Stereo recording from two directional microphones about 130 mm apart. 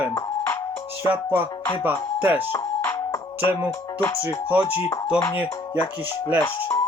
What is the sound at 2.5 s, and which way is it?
Music, 20° left (ahead or behind).